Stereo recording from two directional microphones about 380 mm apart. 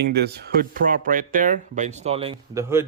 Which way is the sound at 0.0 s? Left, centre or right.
Right.